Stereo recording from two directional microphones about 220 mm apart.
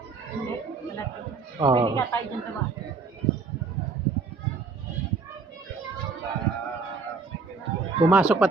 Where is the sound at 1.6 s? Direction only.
20° right (ahead or behind).